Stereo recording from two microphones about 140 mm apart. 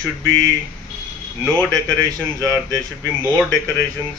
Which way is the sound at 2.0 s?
25° right (ahead or behind).